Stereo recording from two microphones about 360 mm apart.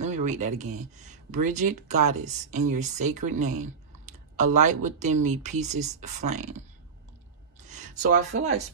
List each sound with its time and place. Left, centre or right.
0.0 s speech: centre
7.6 s speech: centre